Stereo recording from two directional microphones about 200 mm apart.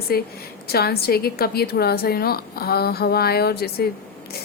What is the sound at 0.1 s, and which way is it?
A woman's voice, 50° left (ahead or behind).